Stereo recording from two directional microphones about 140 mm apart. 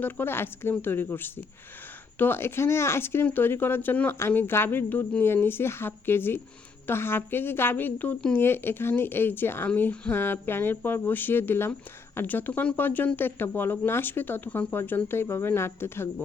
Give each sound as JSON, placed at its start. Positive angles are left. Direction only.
{"t": 0.0, "sound": "a woman's voice", "side_deg": 15}